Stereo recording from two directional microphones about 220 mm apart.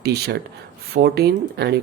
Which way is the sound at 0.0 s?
50° right (ahead or behind).